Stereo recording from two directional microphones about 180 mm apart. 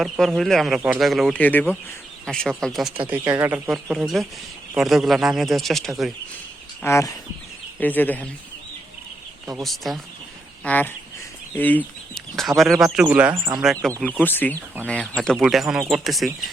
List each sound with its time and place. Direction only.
0.0 s speech: centre (ahead or behind)
3.1 s speech: 15° right (ahead or behind)
3.7 s speech: centre (ahead or behind)
6.8 s speech: 15° left (ahead or behind)
9.6 s speech: centre (ahead or behind); by 13.6 s 15° right (ahead or behind)
13.6 s speech: centre (ahead or behind)
14.3 s speech: 10° left (ahead or behind)